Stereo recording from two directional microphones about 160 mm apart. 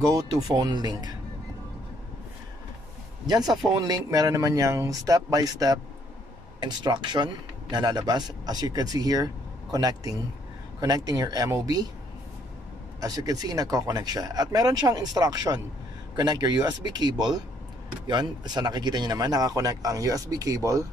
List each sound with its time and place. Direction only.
0.0 s speech: 25° right (ahead or behind)
3.4 s speech: 25° right (ahead or behind)
13.0 s speech: 25° right (ahead or behind)